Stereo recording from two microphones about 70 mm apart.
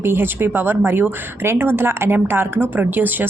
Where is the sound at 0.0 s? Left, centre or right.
Right.